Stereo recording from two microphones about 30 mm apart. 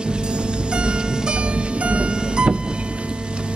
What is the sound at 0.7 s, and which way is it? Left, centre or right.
Music, right.